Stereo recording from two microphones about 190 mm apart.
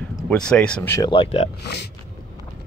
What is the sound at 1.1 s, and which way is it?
Speech, 30° left (ahead or behind).